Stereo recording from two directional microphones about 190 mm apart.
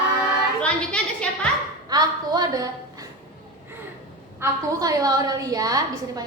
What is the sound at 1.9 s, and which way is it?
Speech, 20° right (ahead or behind).